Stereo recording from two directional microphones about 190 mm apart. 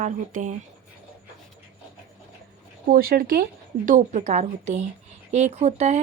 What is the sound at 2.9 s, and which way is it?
Speech, 50° right (ahead or behind).